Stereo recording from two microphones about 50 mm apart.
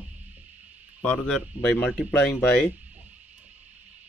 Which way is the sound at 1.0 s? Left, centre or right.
Left.